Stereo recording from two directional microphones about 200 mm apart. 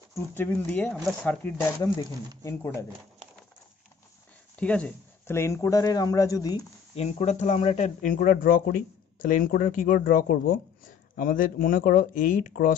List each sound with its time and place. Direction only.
0.1 s speech: 10° left (ahead or behind)
4.6 s speech: 5° left (ahead or behind)
7.0 s speech: 35° left (ahead or behind)